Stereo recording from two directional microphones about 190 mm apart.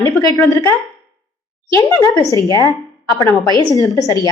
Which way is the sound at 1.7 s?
15° left (ahead or behind).